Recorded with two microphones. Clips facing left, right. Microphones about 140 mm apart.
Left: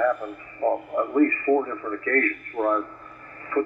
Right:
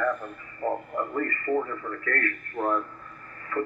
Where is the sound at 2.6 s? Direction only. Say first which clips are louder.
Left 4 dB; 10° left (ahead or behind).